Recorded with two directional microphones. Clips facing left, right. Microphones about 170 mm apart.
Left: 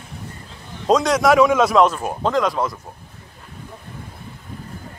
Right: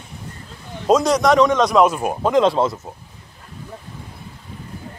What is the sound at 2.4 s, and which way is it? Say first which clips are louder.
Speech: right 7 dB; 25° right (ahead or behind).